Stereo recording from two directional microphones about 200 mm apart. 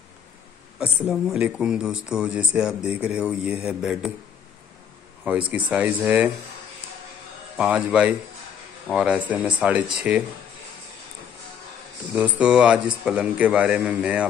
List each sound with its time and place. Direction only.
0.7 s speech: 5° right (ahead or behind)
5.5 s a man's voice: 5° right (ahead or behind)
7.5 s a man's voice: 5° right (ahead or behind)
12.1 s a man's voice: 5° right (ahead or behind)